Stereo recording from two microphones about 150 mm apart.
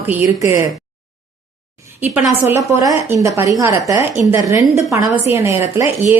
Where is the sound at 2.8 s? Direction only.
25° right (ahead or behind).